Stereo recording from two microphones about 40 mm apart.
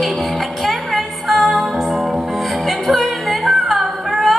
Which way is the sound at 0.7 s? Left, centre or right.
Centre.